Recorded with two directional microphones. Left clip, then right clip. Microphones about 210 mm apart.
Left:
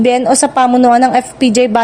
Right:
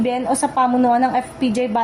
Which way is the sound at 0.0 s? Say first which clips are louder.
Left 9 dB; 45° left (ahead or behind).